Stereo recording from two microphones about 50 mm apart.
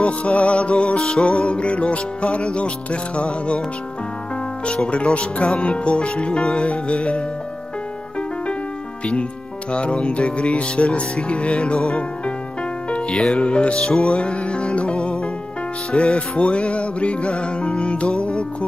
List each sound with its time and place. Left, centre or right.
0.0 s music: left
0.9 s music: centre
1.2 s speech: left
4.9 s speech: left
9.7 s speech: left
13.1 s music: centre
13.4 s speech: left
13.7 s music: centre
14.1 s music: left